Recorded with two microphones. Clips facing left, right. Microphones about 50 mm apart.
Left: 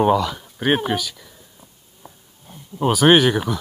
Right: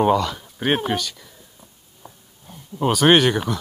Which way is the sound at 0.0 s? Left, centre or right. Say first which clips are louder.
Left 1 dB; centre.